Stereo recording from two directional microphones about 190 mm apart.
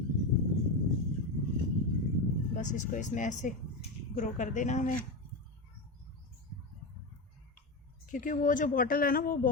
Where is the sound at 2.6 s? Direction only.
40° left (ahead or behind).